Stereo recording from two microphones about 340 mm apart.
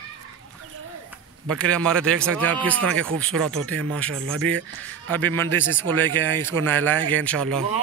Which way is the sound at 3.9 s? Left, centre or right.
Centre.